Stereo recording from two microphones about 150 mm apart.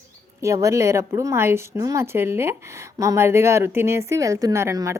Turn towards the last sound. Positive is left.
turn(degrees=-20)  # may be behind; listen again after turning